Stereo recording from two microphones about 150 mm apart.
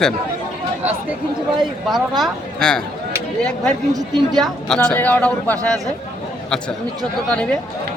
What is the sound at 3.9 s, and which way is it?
Speech, 25° right (ahead or behind).